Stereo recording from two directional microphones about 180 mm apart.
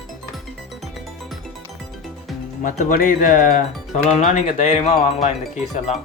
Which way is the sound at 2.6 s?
45° left (ahead or behind).